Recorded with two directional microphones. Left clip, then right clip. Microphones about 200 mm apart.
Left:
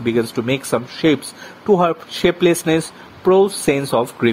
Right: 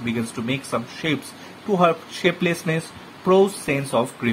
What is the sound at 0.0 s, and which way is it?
Speech, 45° left (ahead or behind).